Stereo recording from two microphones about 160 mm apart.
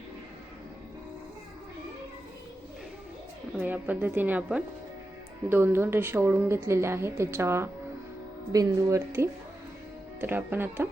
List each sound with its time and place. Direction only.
3.6 s a woman's voice: 10° right (ahead or behind)